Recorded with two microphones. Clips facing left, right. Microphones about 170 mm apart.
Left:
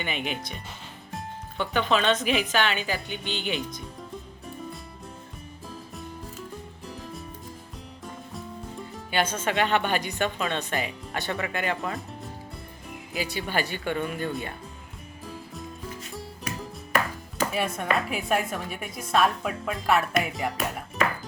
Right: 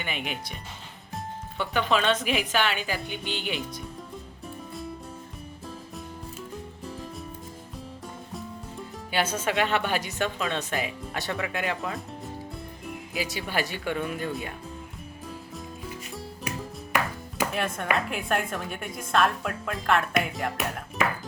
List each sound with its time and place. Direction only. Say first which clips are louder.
0.0 s speech: left 2 dB; 5° right (ahead or behind)
9.0 s speech: left 1 dB; 5° right (ahead or behind)
13.1 s speech: left 1 dB; centre (ahead or behind)
17.5 s speech: left 1 dB; 5° left (ahead or behind)